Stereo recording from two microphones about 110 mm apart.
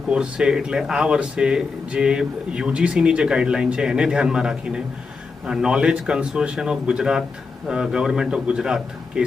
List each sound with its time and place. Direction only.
0.1 s speech: 5° right (ahead or behind)